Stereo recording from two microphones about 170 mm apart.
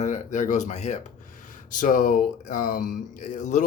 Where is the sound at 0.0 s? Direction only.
45° left (ahead or behind).